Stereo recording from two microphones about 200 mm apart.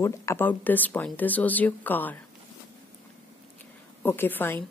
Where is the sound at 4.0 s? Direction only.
10° left (ahead or behind).